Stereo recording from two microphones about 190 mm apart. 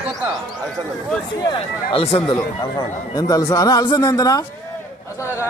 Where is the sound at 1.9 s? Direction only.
30° left (ahead or behind).